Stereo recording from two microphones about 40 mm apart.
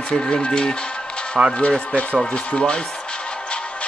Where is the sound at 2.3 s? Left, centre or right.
Left.